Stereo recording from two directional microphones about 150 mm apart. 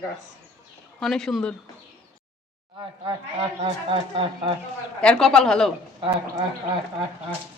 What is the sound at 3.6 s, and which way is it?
Speech, 35° right (ahead or behind).